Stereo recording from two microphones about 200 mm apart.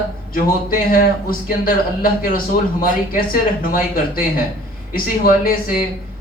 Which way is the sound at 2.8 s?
45° left (ahead or behind).